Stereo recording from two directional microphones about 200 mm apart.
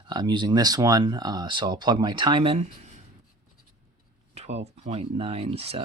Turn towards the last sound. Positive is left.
turn(degrees=-30)  # may be behind; listen again after turning